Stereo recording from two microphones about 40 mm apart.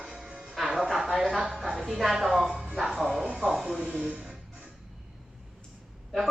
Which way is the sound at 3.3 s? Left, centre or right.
Centre.